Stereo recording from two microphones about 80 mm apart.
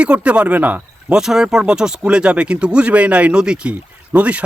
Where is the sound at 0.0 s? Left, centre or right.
Centre.